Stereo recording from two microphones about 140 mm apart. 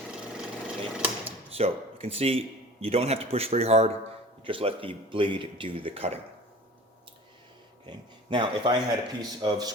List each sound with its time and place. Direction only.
0.1 s a sound: 5° right (ahead or behind)
1.5 s speech: 45° right (ahead or behind)
7.9 s a man's voice: 35° right (ahead or behind)